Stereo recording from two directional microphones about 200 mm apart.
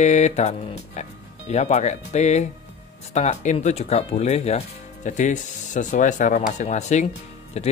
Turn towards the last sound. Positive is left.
turn(degrees=35)  # may be behind; listen again after turning